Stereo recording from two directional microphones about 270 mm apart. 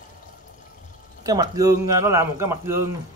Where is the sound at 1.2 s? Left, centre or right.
Centre.